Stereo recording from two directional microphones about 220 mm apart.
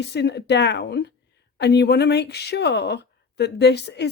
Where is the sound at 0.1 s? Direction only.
50° left (ahead or behind).